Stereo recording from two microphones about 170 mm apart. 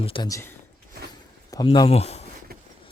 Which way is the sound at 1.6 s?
30° left (ahead or behind).